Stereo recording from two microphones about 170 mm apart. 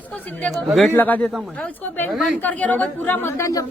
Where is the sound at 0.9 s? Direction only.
10° left (ahead or behind).